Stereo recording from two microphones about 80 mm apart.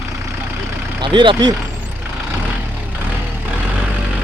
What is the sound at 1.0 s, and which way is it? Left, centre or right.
Speech, right.